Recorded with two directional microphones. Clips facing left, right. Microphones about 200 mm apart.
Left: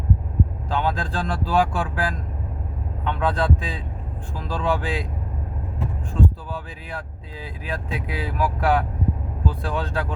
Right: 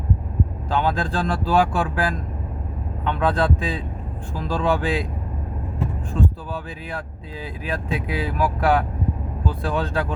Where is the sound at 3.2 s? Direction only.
70° right (ahead or behind).